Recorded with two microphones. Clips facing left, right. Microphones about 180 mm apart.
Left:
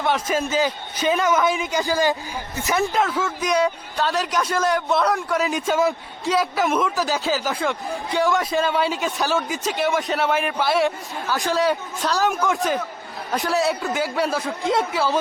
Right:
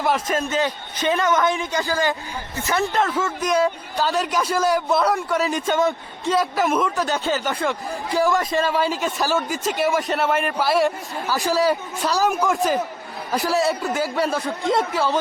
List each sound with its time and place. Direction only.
0.0 s a man's voice: centre (ahead or behind)
1.7 s a man's voice: 15° left (ahead or behind)
2.9 s a man's voice: centre (ahead or behind)